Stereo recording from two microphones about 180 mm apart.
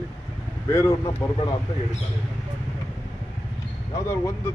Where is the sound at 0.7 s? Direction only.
15° left (ahead or behind).